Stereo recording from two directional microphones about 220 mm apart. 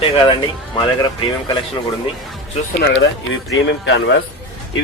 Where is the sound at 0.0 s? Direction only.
25° left (ahead or behind).